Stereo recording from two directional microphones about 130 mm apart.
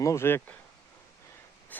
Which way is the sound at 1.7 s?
15° left (ahead or behind).